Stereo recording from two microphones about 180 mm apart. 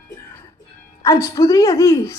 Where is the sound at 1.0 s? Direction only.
15° left (ahead or behind).